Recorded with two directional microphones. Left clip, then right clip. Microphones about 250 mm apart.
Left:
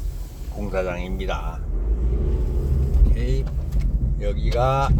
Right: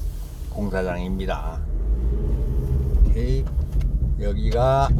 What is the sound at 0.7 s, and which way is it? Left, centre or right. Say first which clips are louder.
Speech: left 1 dB; right.